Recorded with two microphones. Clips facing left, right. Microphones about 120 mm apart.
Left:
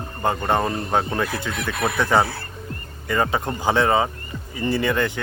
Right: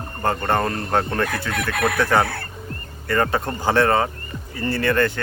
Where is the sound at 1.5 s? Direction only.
55° right (ahead or behind).